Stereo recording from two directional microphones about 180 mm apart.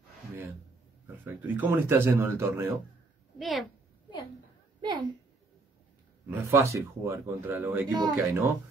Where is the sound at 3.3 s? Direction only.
Centre (ahead or behind).